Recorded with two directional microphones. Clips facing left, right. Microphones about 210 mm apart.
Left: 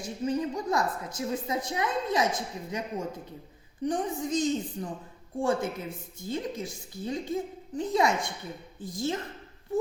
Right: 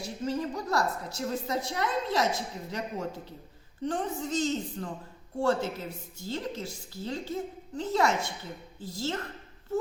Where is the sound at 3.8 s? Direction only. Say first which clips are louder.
Left 2 dB; 15° left (ahead or behind).